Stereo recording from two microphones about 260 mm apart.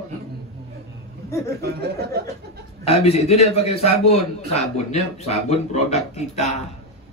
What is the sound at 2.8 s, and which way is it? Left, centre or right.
Speech, left.